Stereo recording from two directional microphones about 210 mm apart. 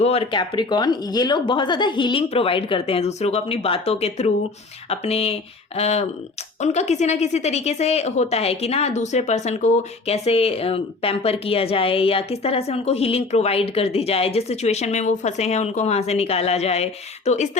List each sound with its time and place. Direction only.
0.0 s speech: 30° left (ahead or behind)